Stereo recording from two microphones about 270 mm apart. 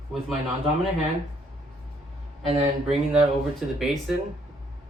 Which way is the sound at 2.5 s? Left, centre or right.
Right.